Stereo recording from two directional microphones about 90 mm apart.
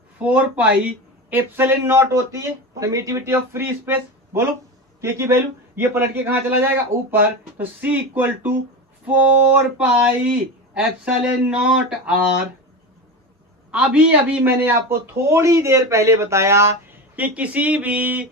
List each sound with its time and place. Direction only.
0.2 s speech: 15° right (ahead or behind)
13.7 s speech: 10° right (ahead or behind)
14.4 s speech: 25° right (ahead or behind)
17.2 s speech: 15° right (ahead or behind)